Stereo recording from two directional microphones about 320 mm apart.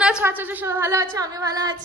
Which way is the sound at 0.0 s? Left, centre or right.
Centre.